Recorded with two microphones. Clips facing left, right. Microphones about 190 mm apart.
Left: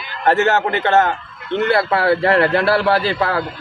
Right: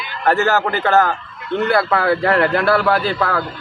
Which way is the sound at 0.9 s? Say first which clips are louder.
Even; 20° left (ahead or behind).